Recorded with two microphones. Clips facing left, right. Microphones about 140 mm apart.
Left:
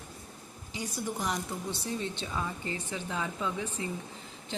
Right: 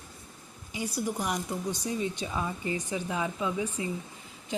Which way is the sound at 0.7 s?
10° right (ahead or behind).